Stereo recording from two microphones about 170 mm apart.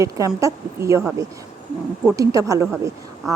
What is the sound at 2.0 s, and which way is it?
A woman's voice, 20° right (ahead or behind).